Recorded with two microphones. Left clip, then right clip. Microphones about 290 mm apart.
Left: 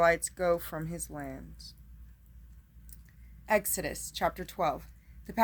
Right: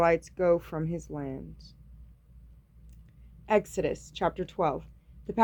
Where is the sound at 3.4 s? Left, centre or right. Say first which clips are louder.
Right 3 dB; centre.